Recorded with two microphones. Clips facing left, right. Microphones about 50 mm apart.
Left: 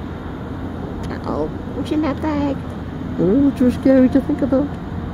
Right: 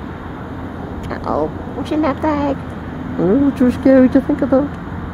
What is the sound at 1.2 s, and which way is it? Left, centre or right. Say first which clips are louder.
Speech: right 5 dB; centre.